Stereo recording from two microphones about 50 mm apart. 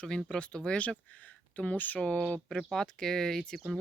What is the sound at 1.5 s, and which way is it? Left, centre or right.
Speech, left.